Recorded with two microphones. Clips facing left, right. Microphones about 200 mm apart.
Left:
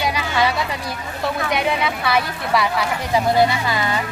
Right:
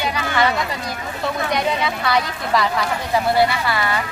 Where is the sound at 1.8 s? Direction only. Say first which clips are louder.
Even; 5° left (ahead or behind).